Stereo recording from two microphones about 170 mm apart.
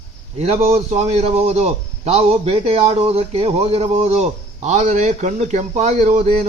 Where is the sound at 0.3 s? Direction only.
40° right (ahead or behind).